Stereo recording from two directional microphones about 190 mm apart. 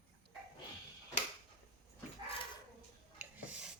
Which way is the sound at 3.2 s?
10° right (ahead or behind).